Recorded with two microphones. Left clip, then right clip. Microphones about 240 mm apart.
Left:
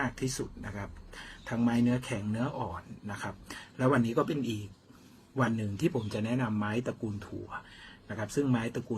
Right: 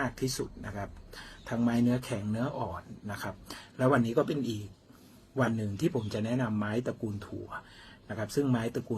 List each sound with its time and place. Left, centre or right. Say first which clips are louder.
0.0 s speech: right 1 dB; centre